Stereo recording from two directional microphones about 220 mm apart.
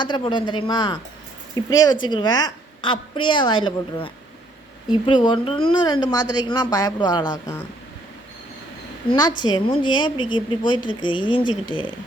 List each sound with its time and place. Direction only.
0.0 s a woman's voice: 20° left (ahead or behind)
9.4 s a woman's voice: 20° left (ahead or behind)